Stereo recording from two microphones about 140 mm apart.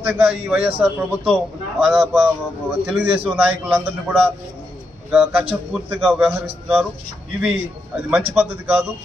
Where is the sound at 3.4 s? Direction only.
10° right (ahead or behind).